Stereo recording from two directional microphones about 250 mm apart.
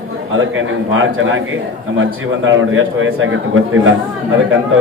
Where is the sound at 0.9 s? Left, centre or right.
Right.